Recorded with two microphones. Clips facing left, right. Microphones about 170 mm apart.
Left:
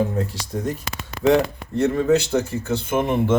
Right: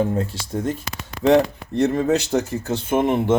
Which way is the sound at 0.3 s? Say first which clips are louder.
Right 2 dB; 25° right (ahead or behind).